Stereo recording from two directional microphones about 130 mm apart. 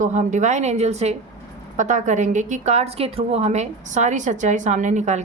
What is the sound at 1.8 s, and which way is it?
A woman's voice, 70° right (ahead or behind).